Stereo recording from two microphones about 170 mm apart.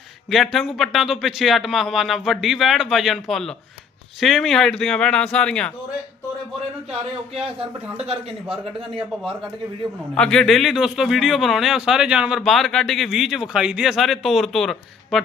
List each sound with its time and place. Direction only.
0.3 s a man's voice: centre (ahead or behind)
7.9 s a man's voice: 35° right (ahead or behind)
10.2 s a man's voice: 5° left (ahead or behind)